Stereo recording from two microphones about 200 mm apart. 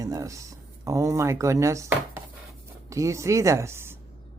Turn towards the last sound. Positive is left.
turn(degrees=-10)  # may be behind; listen again after turning